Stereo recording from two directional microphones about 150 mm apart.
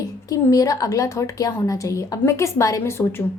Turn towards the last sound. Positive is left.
turn(degrees=15)  # may be behind; listen again after turning